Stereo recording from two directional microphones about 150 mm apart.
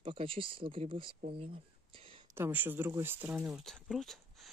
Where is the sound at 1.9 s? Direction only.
35° right (ahead or behind).